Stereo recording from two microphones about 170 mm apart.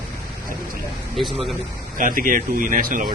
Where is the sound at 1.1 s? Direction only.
Centre (ahead or behind).